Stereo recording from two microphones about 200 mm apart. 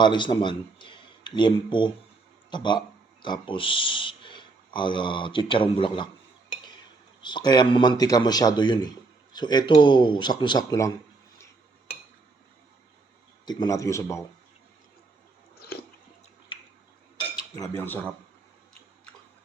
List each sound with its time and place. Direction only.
0.0 s speech: 25° left (ahead or behind)
7.2 s speech: 20° left (ahead or behind)
13.4 s a man's voice: 20° left (ahead or behind)
16.5 s drip: 25° left (ahead or behind)
17.5 s a man's voice: 15° left (ahead or behind)